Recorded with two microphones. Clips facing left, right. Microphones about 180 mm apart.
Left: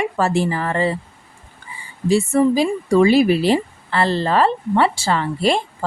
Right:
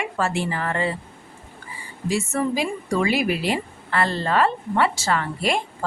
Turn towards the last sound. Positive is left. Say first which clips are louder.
# left 5 dB
turn(degrees=30)  # may be behind; listen again after turning